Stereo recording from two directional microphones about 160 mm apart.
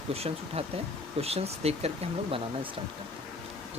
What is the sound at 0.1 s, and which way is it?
Speech, 40° right (ahead or behind).